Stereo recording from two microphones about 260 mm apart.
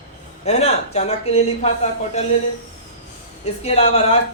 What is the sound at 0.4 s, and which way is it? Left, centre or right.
A man's voice, left.